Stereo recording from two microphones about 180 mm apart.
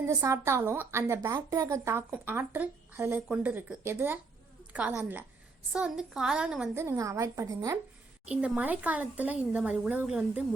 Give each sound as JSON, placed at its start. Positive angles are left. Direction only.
{"t": 0.1, "sound": "a woman's voice", "side_deg": -15}
{"t": 8.3, "sound": "a woman's voice", "side_deg": -5}